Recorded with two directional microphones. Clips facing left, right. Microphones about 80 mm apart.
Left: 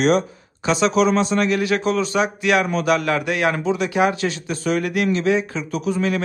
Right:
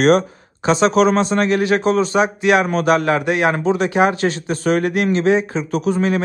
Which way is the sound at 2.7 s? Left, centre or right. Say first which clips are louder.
Right 3 dB; right.